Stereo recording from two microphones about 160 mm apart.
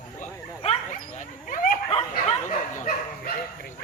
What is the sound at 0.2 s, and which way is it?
Dog, 45° left (ahead or behind).